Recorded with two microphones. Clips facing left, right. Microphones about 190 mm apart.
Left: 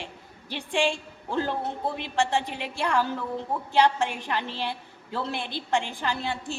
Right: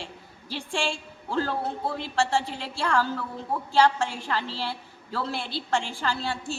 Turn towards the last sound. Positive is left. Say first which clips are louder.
# even
turn(degrees=20)  # may be behind; listen again after turning